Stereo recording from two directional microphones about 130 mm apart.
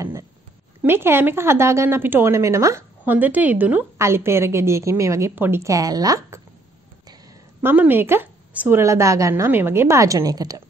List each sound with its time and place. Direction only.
0.8 s a woman's voice: 15° right (ahead or behind)
7.6 s a woman's voice: 15° right (ahead or behind); by 10.6 s 30° right (ahead or behind)